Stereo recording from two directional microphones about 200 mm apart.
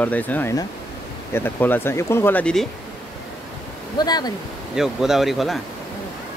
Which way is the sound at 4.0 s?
20° left (ahead or behind).